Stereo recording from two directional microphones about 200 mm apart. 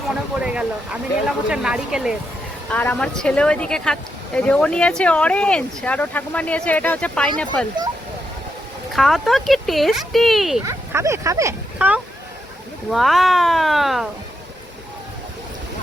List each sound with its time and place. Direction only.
0.3 s speech: 5° right (ahead or behind)
2.6 s speech: 5° left (ahead or behind)
8.9 s speech: centre (ahead or behind)
10.7 s speech: 15° right (ahead or behind)
12.9 s speech: centre (ahead or behind)